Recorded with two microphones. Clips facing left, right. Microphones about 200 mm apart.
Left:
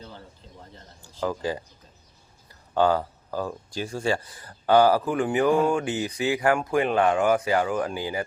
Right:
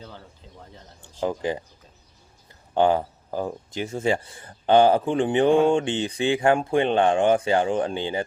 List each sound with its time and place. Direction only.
1.2 s speech: 20° right (ahead or behind)
2.7 s speech: 20° right (ahead or behind)